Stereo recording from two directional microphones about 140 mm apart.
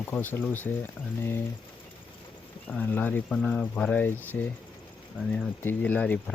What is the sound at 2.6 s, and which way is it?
Speech, 10° left (ahead or behind).